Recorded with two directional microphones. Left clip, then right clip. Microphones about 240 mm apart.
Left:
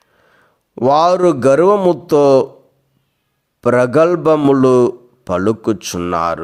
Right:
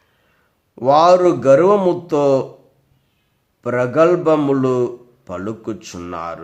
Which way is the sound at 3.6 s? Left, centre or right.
Left.